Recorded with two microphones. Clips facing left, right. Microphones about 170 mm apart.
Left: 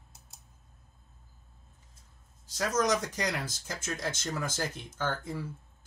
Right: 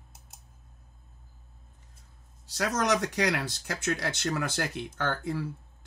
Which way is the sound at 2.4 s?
70° right (ahead or behind).